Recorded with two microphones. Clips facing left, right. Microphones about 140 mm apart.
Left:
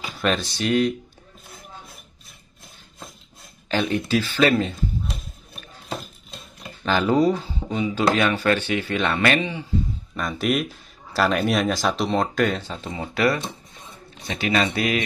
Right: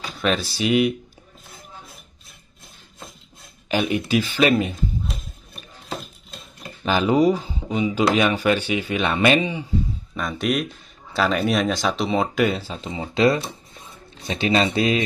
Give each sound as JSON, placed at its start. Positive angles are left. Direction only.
{"t": 0.0, "sound": "speech", "side_deg": 0}
{"t": 3.7, "sound": "speech", "side_deg": -15}
{"t": 5.0, "sound": "a sound", "side_deg": 0}
{"t": 6.8, "sound": "speech", "side_deg": -15}
{"t": 10.1, "sound": "speech", "side_deg": 0}